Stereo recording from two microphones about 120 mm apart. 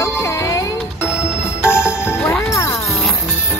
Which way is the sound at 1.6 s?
20° left (ahead or behind).